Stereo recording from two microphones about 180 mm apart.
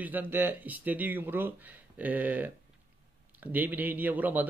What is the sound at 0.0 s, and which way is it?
A man's voice, 10° right (ahead or behind).